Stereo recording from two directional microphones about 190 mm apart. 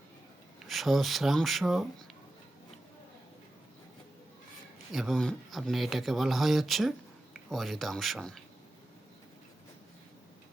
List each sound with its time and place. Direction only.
0.6 s speech: centre (ahead or behind)
4.9 s speech: centre (ahead or behind)